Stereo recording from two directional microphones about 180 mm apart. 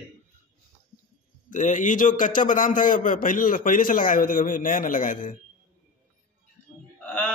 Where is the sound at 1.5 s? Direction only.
45° left (ahead or behind).